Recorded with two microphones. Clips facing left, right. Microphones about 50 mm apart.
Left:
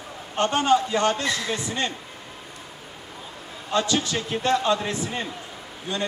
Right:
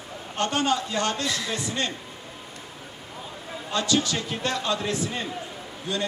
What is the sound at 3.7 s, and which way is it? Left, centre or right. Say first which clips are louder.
A man's voice: left 1 dB; left.